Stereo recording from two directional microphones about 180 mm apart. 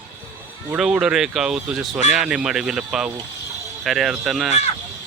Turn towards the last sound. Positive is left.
turn(degrees=0)  # may be behind; listen again after turning